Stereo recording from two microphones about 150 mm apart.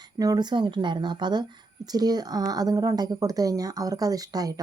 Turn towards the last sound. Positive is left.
turn(degrees=-25)  # may be behind; listen again after turning